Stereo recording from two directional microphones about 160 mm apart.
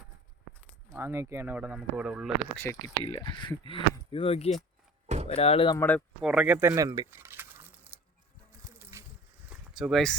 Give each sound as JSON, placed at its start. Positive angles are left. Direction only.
{"t": 0.9, "sound": "speech", "side_deg": -15}
{"t": 2.6, "sound": "speech", "side_deg": 20}
{"t": 5.0, "sound": "door", "side_deg": -45}
{"t": 5.3, "sound": "speech", "side_deg": 35}
{"t": 5.7, "sound": "speech", "side_deg": 10}
{"t": 6.2, "sound": "speech", "side_deg": -10}
{"t": 7.1, "sound": "boiling", "side_deg": -15}
{"t": 7.9, "sound": "music", "side_deg": -10}
{"t": 8.6, "sound": "a sound", "side_deg": -15}
{"t": 9.5, "sound": "a sound", "side_deg": -5}